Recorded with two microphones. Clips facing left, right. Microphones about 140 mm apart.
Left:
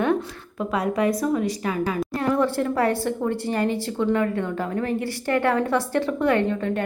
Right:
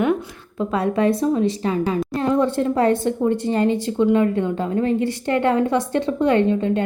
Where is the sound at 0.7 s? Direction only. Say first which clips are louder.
Right 3 dB; 30° right (ahead or behind).